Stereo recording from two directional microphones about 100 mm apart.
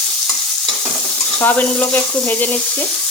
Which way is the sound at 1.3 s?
15° left (ahead or behind).